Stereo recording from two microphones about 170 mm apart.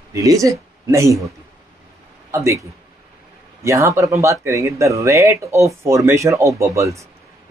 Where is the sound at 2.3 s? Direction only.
15° right (ahead or behind).